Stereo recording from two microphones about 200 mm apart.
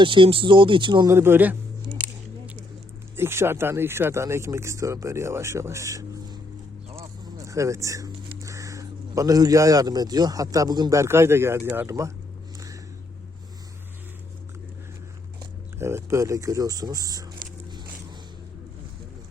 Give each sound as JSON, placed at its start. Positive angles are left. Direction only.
{"t": 0.0, "sound": "speech", "side_deg": -25}
{"t": 3.2, "sound": "speech", "side_deg": -10}
{"t": 15.8, "sound": "speech", "side_deg": -10}